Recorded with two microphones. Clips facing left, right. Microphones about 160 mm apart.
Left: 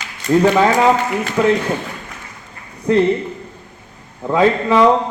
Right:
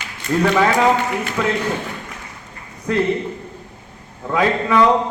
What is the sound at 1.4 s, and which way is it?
Speech, 20° left (ahead or behind).